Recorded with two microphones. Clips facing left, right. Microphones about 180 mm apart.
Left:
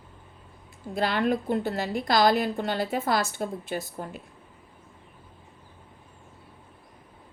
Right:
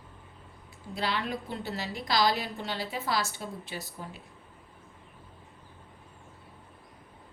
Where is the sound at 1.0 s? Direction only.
50° left (ahead or behind).